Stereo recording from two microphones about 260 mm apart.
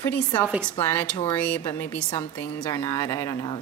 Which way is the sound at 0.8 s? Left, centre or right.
Centre.